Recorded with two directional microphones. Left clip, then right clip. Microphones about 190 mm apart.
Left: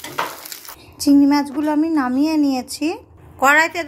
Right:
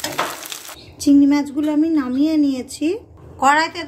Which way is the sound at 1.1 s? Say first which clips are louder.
Even; 15° left (ahead or behind).